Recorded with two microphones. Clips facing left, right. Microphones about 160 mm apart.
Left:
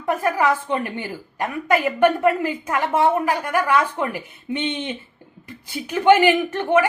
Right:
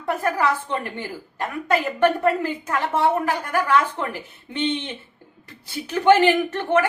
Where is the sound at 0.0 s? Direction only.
15° left (ahead or behind).